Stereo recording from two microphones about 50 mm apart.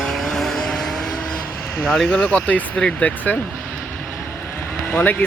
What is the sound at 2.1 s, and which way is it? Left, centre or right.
Speech, left.